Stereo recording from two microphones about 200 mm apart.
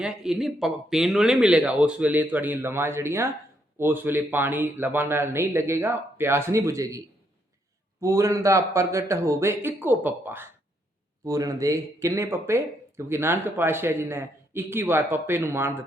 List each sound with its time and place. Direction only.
0.0 s speech: centre (ahead or behind)
8.0 s speech: 15° right (ahead or behind)